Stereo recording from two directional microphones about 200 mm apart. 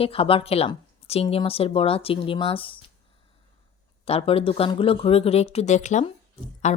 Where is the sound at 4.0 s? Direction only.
30° left (ahead or behind).